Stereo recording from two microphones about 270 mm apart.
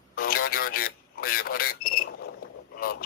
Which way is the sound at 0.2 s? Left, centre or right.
Left.